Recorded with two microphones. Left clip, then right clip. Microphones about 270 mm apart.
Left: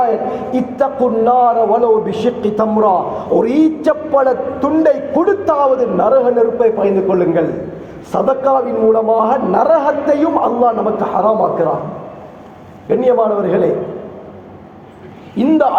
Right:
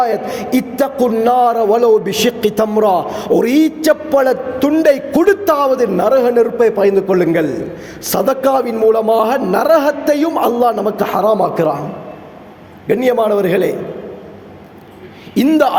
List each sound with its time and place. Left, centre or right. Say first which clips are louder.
0.5 s a man's voice: right 1 dB; right
12.9 s a man's voice: left 1 dB; right
15.4 s a man's voice: right 1 dB; right